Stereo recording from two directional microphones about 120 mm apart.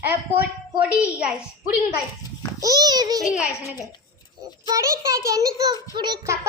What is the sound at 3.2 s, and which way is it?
Speech, centre (ahead or behind).